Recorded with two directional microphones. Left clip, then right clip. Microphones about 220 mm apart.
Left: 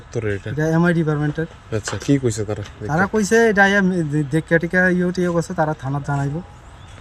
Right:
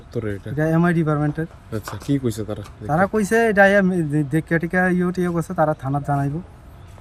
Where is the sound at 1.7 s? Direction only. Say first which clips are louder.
Left 5 dB; 25° left (ahead or behind).